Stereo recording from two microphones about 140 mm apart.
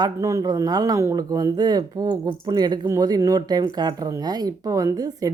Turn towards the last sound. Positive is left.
turn(degrees=-25)  # may be behind; listen again after turning